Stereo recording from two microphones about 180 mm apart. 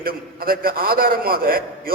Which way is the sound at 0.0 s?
55° right (ahead or behind).